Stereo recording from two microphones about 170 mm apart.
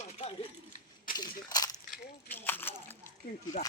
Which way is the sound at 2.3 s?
10° left (ahead or behind).